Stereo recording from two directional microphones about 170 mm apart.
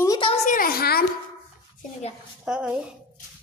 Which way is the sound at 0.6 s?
60° left (ahead or behind).